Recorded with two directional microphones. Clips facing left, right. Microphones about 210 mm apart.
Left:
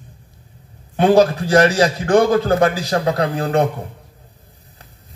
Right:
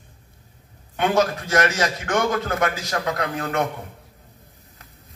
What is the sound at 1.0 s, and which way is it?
A man's voice, 35° left (ahead or behind).